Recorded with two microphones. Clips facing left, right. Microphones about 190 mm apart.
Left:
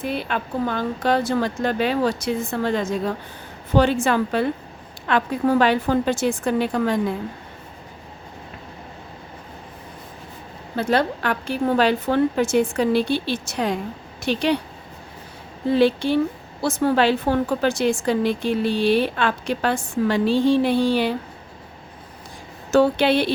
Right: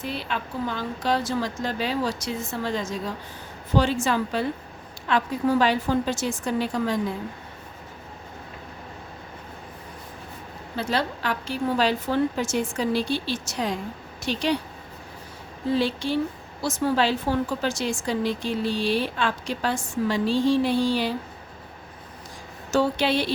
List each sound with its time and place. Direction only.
0.0 s a woman's voice: 55° left (ahead or behind)
10.8 s a woman's voice: 55° left (ahead or behind)
15.7 s a woman's voice: 60° left (ahead or behind)
22.7 s a woman's voice: 60° left (ahead or behind)